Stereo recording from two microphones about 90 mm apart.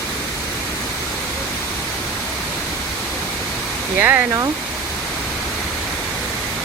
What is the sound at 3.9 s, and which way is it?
Speech, 20° right (ahead or behind).